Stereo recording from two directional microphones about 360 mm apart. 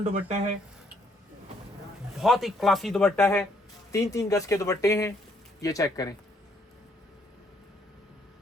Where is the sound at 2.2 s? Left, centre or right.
Centre.